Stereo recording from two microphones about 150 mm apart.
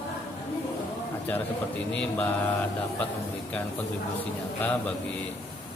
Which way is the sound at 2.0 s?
10° left (ahead or behind).